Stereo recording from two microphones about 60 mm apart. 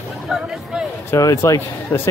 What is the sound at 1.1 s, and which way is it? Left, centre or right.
Speech, left.